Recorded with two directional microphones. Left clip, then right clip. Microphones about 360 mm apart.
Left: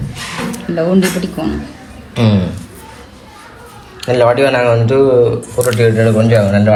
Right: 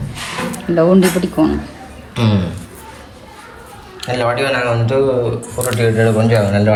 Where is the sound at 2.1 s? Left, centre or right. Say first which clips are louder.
Left 3 dB; centre.